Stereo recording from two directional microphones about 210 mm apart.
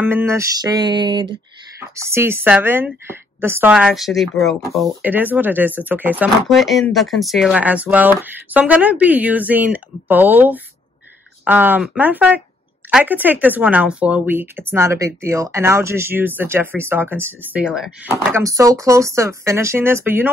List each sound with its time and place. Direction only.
0.0 s speech: 10° right (ahead or behind)
18.1 s speech: 15° right (ahead or behind)